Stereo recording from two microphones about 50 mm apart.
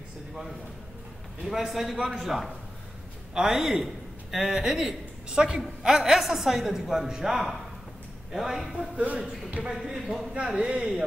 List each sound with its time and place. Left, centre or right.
1.4 s a woman's voice: centre
8.9 s speech: right
9.8 s a woman's voice: centre